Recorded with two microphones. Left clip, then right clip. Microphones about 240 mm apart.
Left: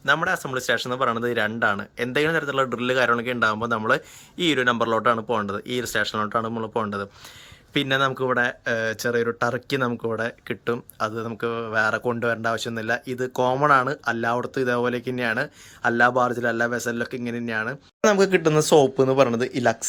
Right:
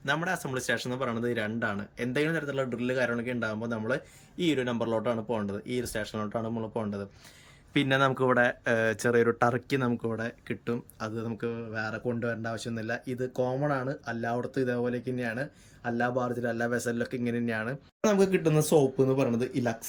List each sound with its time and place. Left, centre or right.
0.0 s speech: centre
6.4 s speech: left
7.7 s speech: centre